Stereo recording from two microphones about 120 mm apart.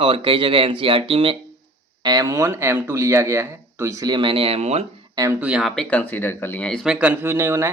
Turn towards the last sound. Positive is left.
turn(degrees=-20)  # may be behind; listen again after turning